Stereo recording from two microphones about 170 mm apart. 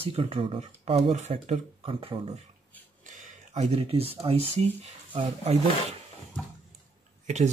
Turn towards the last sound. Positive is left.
turn(degrees=-45)  # may be behind; listen again after turning